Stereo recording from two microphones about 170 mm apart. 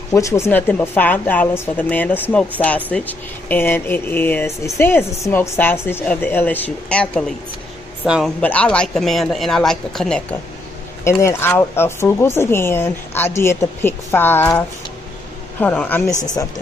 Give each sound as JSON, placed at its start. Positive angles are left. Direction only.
{"t": 0.1, "sound": "speech", "side_deg": 15}
{"t": 8.0, "sound": "speech", "side_deg": -5}
{"t": 8.4, "sound": "speech", "side_deg": 10}
{"t": 11.1, "sound": "speech", "side_deg": 15}
{"t": 15.6, "sound": "speech", "side_deg": 10}